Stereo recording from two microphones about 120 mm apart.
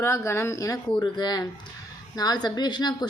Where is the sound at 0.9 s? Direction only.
35° left (ahead or behind).